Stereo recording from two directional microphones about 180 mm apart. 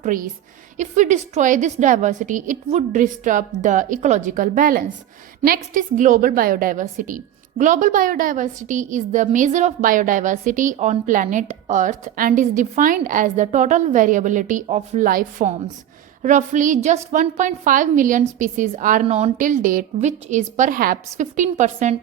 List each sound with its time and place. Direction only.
0.0 s a woman's voice: 50° right (ahead or behind)